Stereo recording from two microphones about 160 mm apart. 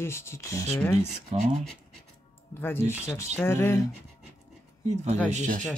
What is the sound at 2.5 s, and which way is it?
Speech, 15° left (ahead or behind).